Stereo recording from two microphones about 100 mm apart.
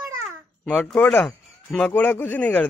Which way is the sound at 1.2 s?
10° left (ahead or behind).